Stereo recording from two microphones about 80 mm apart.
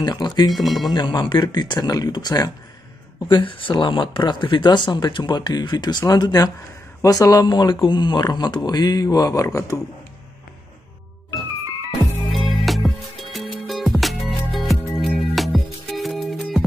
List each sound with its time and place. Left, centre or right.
0.0 s speech: left
0.5 s speech: centre
0.8 s speech: left
3.3 s speech: left
7.0 s speech: left
12.3 s music: centre